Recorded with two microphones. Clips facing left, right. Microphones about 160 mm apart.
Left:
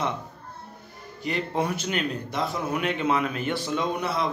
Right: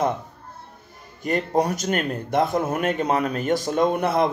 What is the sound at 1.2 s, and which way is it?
Speech, 45° right (ahead or behind).